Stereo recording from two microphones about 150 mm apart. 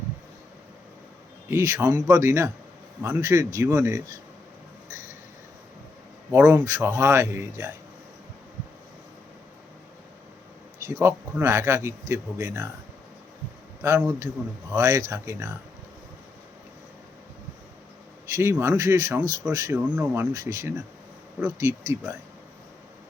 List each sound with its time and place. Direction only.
1.5 s speech: 20° right (ahead or behind)
6.3 s speech: 15° right (ahead or behind)
10.8 s speech: 20° right (ahead or behind)
13.8 s speech: 15° right (ahead or behind)
18.3 s speech: 20° right (ahead or behind)